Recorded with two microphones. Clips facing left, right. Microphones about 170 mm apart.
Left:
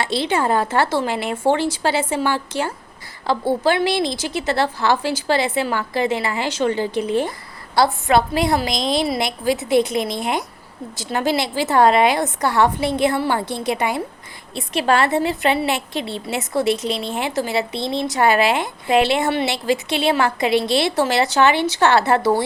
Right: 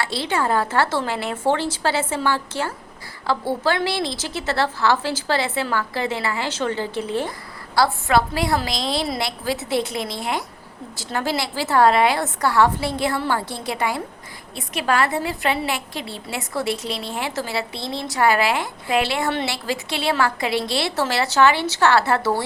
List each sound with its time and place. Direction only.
0.0 s a woman's voice: 20° left (ahead or behind)